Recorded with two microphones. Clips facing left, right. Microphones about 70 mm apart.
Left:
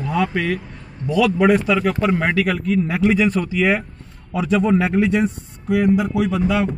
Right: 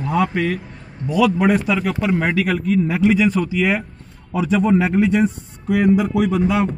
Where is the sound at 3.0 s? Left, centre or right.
Centre.